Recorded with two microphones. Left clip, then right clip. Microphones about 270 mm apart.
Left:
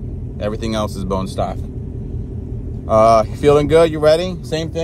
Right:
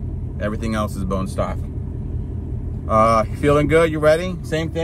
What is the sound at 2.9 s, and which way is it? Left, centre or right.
Speech, centre.